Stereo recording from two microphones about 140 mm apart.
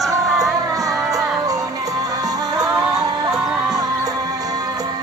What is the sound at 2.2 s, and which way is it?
Music, 25° right (ahead or behind).